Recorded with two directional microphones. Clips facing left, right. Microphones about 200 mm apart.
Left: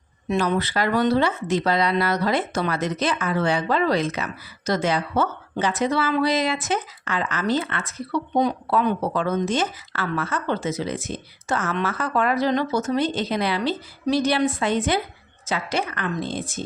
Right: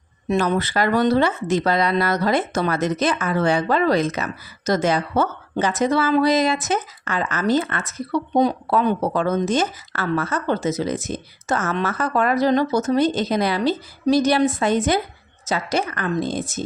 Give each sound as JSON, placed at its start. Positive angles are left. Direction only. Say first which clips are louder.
{"t": 0.3, "sound": "speech", "louder": "right 2 dB", "side_deg": -45}